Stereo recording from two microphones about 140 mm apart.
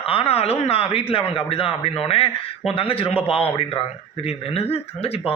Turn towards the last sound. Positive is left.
turn(degrees=45)  # may be behind; listen again after turning